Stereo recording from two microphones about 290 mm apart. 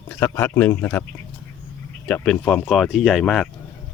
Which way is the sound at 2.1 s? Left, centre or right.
Centre.